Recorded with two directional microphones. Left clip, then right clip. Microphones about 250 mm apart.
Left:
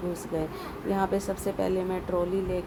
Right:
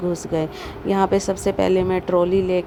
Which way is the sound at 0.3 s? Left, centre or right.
Right.